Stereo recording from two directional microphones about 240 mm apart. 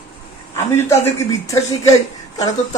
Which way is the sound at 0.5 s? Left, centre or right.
Centre.